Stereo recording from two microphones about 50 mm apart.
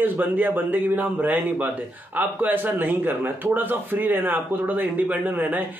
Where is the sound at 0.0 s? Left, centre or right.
Right.